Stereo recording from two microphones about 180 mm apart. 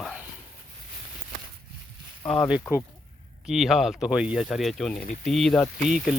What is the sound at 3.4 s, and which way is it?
Speech, centre (ahead or behind).